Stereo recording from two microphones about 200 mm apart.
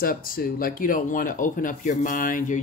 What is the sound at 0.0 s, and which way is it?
Speech, 45° left (ahead or behind).